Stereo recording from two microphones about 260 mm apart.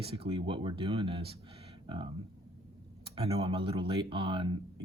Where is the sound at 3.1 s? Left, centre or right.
Right.